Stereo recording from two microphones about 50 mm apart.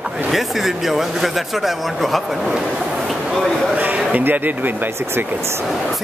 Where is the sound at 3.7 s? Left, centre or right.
Right.